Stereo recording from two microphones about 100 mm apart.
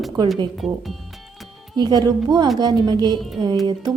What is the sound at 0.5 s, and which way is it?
Speech, centre (ahead or behind).